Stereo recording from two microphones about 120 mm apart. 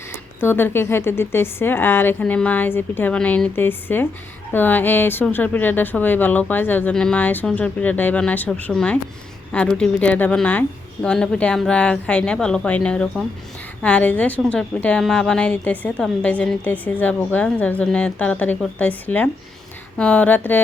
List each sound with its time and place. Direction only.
0.1 s a woman's voice: 20° left (ahead or behind)